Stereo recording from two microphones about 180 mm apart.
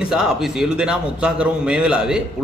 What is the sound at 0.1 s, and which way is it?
Speech, 5° right (ahead or behind).